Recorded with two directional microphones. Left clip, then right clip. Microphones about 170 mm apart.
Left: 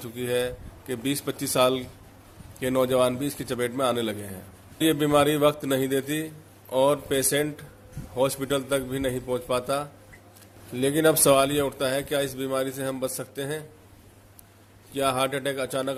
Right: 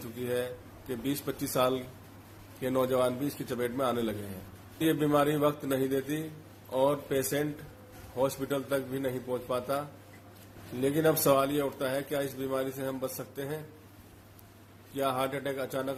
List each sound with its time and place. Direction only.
0.2 s speech: 55° left (ahead or behind)
14.9 s speech: 55° left (ahead or behind)